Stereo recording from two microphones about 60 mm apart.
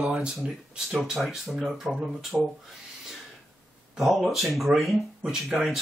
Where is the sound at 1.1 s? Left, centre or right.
Centre.